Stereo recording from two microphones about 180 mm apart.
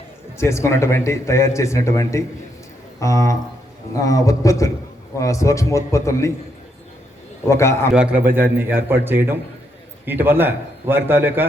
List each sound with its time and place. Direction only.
0.3 s speech: 15° left (ahead or behind)
7.4 s speech: 15° left (ahead or behind)
7.9 s a man's voice: 5° right (ahead or behind)